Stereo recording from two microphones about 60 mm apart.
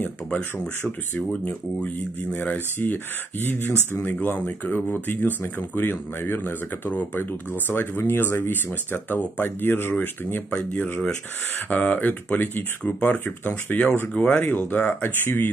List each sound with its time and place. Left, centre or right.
0.0 s a sound: left
1.3 s speech: centre
2.5 s speech: left
9.9 s speech: left